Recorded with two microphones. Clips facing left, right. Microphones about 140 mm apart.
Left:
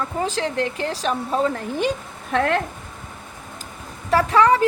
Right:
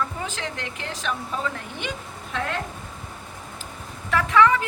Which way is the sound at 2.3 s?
60° left (ahead or behind).